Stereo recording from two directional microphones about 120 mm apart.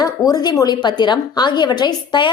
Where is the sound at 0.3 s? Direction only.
30° left (ahead or behind).